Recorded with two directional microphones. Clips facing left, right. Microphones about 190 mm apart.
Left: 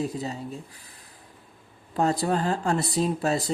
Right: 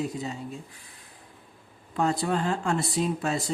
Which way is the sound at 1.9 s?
40° left (ahead or behind).